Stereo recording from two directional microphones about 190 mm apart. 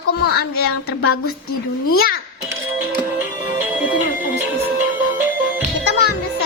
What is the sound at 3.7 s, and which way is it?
Music, 10° right (ahead or behind).